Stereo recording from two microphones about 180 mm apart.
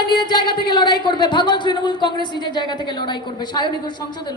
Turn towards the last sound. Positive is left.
turn(degrees=25)  # may be behind; listen again after turning